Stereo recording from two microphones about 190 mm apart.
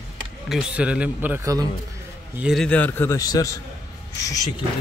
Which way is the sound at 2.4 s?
Centre (ahead or behind).